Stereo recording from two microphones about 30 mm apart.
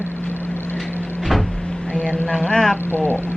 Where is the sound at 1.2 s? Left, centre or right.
Centre.